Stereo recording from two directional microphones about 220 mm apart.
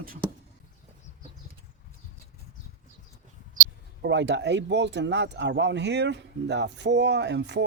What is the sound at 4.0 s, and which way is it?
Speech, 55° right (ahead or behind).